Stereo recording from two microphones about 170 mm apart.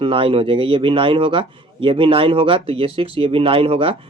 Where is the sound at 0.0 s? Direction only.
30° right (ahead or behind).